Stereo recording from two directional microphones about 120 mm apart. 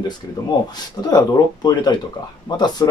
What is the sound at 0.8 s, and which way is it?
Speech, 35° left (ahead or behind).